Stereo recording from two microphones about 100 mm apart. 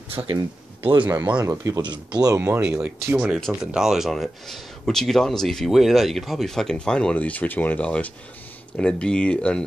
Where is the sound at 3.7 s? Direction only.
5° right (ahead or behind).